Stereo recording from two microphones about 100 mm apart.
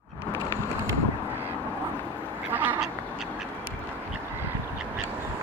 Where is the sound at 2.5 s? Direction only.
20° right (ahead or behind).